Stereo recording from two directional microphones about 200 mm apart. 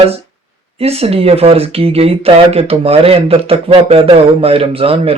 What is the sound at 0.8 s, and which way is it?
Speech, 30° right (ahead or behind).